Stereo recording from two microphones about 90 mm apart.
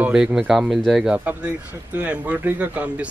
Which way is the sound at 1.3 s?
15° right (ahead or behind).